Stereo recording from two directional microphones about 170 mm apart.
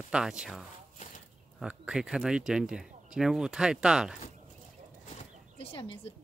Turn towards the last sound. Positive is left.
turn(degrees=30)  # may be behind; listen again after turning